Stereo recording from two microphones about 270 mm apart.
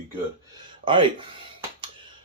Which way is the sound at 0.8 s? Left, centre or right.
Centre.